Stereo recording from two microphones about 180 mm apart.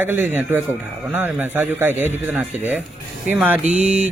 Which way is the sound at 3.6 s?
40° right (ahead or behind).